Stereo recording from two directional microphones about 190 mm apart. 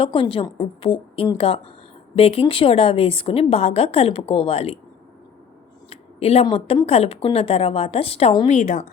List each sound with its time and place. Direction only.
0.0 s a woman's voice: 30° left (ahead or behind)
5.9 s a woman's voice: 30° left (ahead or behind)
8.4 s a woman's voice: 40° left (ahead or behind)